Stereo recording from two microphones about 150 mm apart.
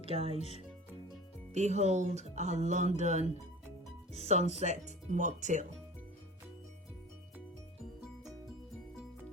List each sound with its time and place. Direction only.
0.0 s speech: 40° right (ahead or behind)
0.3 s speech: 45° left (ahead or behind)
1.5 s speech: 50° right (ahead or behind)